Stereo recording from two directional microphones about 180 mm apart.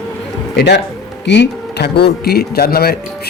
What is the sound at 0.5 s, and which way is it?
A man's voice, 65° left (ahead or behind).